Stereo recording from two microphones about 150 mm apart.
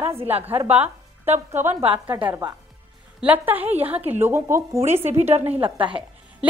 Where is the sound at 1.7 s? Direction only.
45° right (ahead or behind).